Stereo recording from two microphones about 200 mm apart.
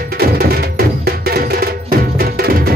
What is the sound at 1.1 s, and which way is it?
Music, 50° right (ahead or behind).